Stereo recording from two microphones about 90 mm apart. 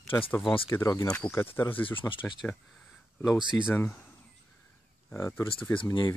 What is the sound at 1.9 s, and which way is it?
Speech, 70° left (ahead or behind).